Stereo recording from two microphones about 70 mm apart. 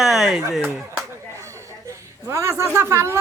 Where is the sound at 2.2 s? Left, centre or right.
Right.